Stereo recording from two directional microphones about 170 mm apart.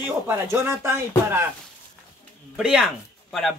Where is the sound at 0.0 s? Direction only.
15° right (ahead or behind).